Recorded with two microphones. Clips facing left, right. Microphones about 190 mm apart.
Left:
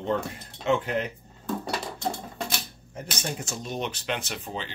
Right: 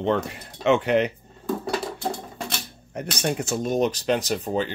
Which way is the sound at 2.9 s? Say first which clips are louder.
Right 8 dB; 70° right (ahead or behind).